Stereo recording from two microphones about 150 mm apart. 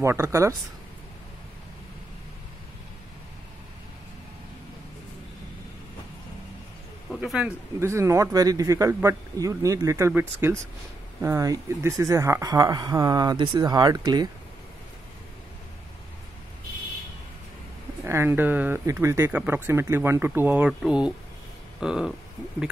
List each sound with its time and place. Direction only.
0.0 s speech: 20° right (ahead or behind)
7.2 s a sound: 5° right (ahead or behind)
7.8 s speech: 20° right (ahead or behind)
18.0 s speech: 15° right (ahead or behind)